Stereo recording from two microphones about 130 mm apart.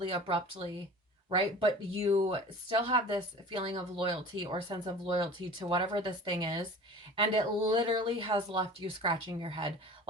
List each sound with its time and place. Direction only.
0.1 s speech: 45° right (ahead or behind)